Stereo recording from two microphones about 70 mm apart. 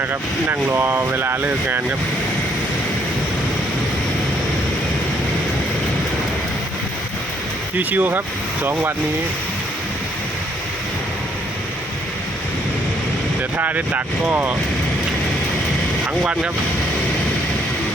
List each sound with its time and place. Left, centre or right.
0.1 s speech: right
7.8 s speech: right
13.6 s speech: right
16.2 s speech: centre